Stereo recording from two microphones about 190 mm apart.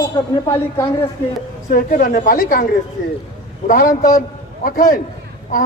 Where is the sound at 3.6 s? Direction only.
45° left (ahead or behind).